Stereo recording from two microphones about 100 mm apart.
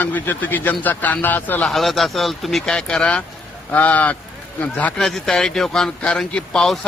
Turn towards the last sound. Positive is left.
turn(degrees=5)  # may be behind; listen again after turning